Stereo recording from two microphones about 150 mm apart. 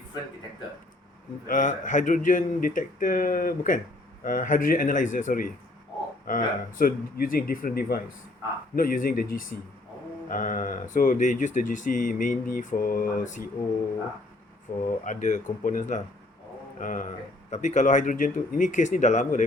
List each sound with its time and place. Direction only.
1.5 s speech: 60° left (ahead or behind); by 8.0 s 85° left
8.7 s speech: 65° left (ahead or behind)
14.7 s speech: 75° left (ahead or behind)
15.0 s speech: 55° left (ahead or behind)